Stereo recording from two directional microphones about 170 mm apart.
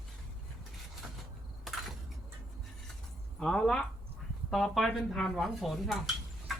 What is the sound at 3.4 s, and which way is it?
Speech, 5° left (ahead or behind).